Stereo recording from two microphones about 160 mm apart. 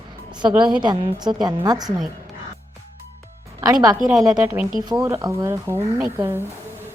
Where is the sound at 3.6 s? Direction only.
25° right (ahead or behind).